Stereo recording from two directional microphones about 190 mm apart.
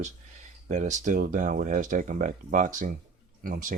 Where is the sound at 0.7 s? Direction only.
40° right (ahead or behind).